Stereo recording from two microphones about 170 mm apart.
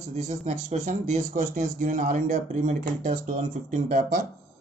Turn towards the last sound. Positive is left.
turn(degrees=-50)  # may be behind; listen again after turning